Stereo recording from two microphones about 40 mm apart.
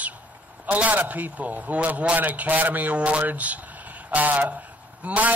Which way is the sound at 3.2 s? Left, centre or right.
Right.